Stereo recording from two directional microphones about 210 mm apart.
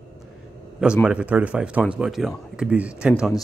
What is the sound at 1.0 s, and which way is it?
Speech, 5° right (ahead or behind).